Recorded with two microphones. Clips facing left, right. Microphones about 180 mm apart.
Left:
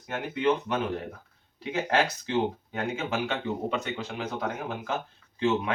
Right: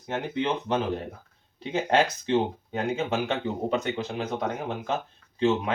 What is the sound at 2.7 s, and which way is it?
Speech, 30° right (ahead or behind).